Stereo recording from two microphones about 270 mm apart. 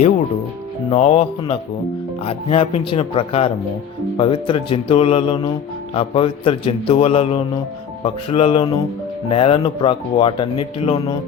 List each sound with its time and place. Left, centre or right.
0.9 s speech: left